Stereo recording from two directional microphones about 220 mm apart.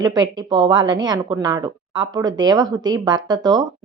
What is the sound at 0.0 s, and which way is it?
A woman's voice, 20° right (ahead or behind).